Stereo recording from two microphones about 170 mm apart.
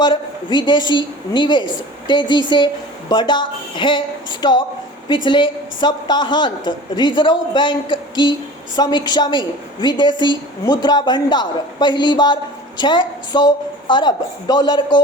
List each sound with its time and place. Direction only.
0.0 s a woman's voice: 25° left (ahead or behind)